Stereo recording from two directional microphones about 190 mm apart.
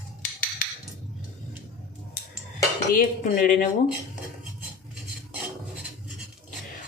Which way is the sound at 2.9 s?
45° left (ahead or behind).